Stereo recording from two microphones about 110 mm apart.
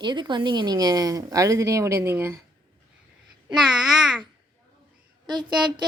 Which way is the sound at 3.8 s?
5° right (ahead or behind).